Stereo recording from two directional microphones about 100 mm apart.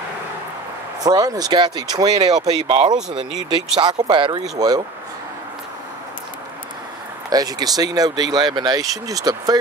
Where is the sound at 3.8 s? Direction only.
50° right (ahead or behind).